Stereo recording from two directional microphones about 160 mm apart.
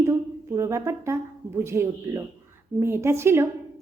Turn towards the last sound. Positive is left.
turn(degrees=-15)  # may be behind; listen again after turning